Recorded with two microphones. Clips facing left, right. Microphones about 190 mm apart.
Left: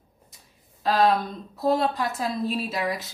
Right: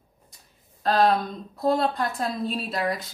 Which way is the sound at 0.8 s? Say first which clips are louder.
Even; centre (ahead or behind).